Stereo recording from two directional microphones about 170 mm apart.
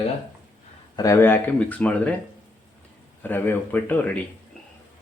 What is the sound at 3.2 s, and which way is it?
Speech, 10° left (ahead or behind).